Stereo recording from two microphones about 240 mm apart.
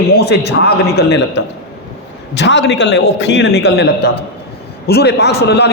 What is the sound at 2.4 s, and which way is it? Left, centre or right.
A man's voice, left.